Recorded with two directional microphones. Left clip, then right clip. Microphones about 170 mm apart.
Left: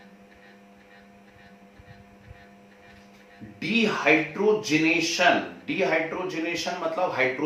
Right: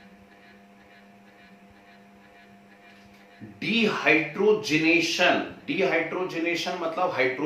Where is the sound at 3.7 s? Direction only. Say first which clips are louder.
Even; 20° right (ahead or behind).